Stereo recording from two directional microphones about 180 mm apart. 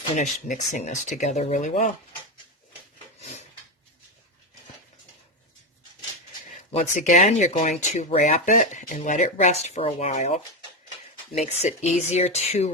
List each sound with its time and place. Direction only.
0.2 s speech: 45° left (ahead or behind)
3.2 s a sound: 40° left (ahead or behind)
6.5 s speech: 40° left (ahead or behind)